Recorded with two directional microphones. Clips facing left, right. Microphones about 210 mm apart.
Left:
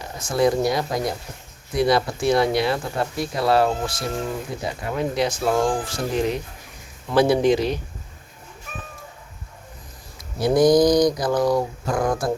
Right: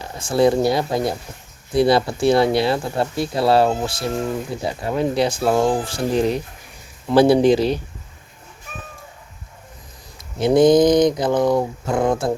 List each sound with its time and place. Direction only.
0.2 s speech: 30° right (ahead or behind)
10.3 s speech: 25° right (ahead or behind)